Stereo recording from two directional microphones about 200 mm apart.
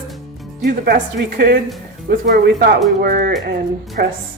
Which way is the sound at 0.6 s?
45° right (ahead or behind).